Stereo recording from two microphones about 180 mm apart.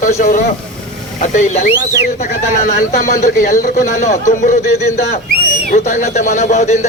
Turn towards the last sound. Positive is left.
turn(degrees=40)  # may be behind; listen again after turning